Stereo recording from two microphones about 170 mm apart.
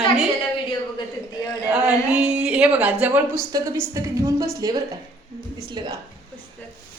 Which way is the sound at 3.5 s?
20° right (ahead or behind).